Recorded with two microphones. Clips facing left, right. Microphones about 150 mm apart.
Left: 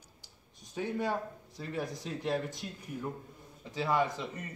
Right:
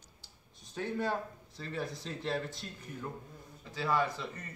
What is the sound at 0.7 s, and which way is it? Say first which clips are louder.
A man's voice: left 1 dB; 10° left (ahead or behind).